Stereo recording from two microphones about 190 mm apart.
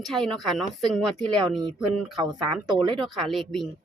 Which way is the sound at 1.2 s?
25° right (ahead or behind).